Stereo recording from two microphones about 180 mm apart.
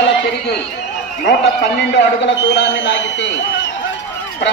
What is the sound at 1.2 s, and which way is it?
A man's voice, 70° left (ahead or behind).